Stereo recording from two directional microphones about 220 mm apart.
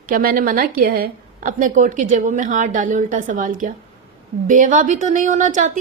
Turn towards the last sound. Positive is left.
turn(degrees=-35)  # may be behind; listen again after turning